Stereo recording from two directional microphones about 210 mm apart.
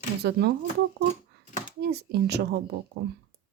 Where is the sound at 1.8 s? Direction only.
50° right (ahead or behind).